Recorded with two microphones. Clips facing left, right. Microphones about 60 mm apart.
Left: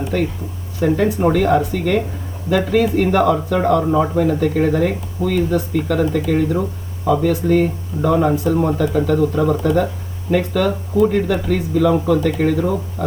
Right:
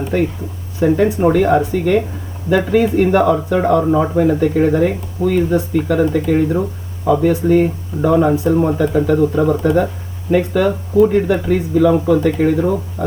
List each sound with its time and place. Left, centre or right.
0.8 s speech: centre